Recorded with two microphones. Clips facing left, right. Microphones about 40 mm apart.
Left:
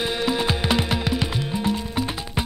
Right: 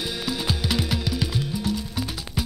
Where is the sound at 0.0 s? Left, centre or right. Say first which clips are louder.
Left 5 dB; left.